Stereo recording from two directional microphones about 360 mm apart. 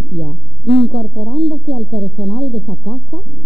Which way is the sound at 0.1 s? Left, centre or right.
Right.